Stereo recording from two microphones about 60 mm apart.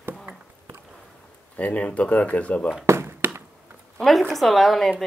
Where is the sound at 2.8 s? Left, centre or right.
Right.